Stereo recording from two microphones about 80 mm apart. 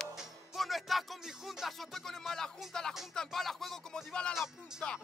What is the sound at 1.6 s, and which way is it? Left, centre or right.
Speech, centre.